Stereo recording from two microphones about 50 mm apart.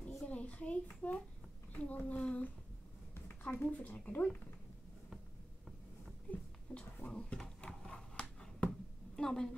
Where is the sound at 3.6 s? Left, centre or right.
Left.